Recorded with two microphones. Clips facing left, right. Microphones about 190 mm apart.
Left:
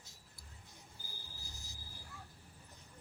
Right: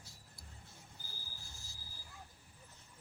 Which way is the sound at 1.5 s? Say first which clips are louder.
Left 3 dB; 20° left (ahead or behind).